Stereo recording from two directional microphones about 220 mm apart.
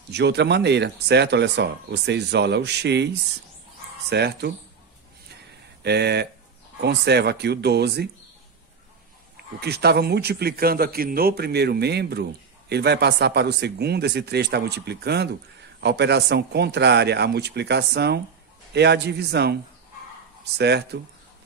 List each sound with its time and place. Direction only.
0.1 s a man's voice: 50° right (ahead or behind)
5.8 s a man's voice: 50° right (ahead or behind)
9.6 s a man's voice: 45° right (ahead or behind)